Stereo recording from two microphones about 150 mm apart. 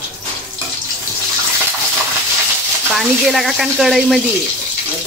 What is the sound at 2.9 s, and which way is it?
Speech, centre (ahead or behind).